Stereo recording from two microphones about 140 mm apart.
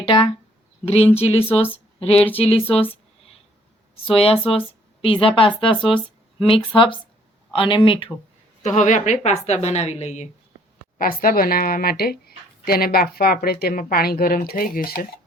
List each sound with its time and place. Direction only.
0.0 s a woman's voice: 40° left (ahead or behind)
4.0 s a woman's voice: 45° left (ahead or behind)
8.6 s a woman's voice: 60° left (ahead or behind)
10.9 s speech: 90° left